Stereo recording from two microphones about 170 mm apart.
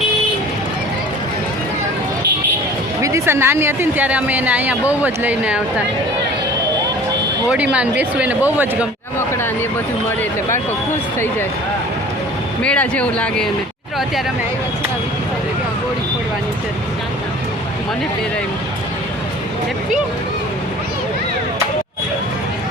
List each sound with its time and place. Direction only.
3.0 s speech: 15° right (ahead or behind)
7.5 s speech: 5° right (ahead or behind)
12.6 s speech: 5° left (ahead or behind)